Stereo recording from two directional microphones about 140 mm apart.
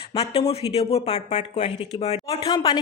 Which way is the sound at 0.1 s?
45° left (ahead or behind).